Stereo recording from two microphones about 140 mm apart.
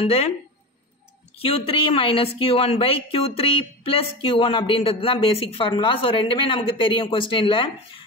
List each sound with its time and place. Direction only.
0.0 s speech: 45° left (ahead or behind)
1.4 s speech: 45° left (ahead or behind)